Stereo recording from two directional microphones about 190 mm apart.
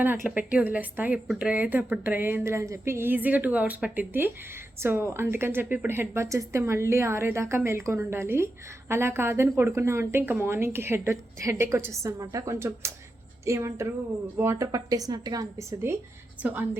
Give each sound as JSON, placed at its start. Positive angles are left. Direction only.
{"t": 0.0, "sound": "speech", "side_deg": -10}